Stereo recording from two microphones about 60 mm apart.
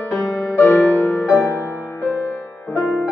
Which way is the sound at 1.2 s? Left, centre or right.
Left.